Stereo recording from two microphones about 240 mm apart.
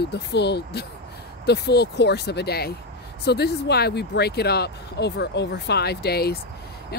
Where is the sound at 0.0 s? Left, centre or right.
Left.